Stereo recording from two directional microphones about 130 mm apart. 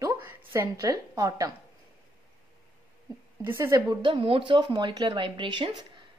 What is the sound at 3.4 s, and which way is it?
Speech, 20° right (ahead or behind).